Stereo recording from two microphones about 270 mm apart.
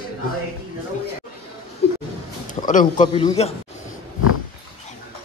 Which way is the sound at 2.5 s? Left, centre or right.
Left.